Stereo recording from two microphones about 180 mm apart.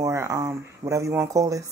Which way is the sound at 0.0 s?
15° right (ahead or behind).